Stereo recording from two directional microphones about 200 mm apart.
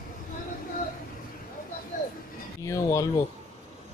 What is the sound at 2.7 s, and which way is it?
Speech, 15° left (ahead or behind).